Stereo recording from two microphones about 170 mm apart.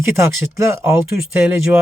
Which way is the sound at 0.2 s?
15° right (ahead or behind).